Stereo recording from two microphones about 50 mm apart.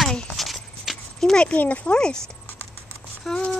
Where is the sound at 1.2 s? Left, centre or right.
Centre.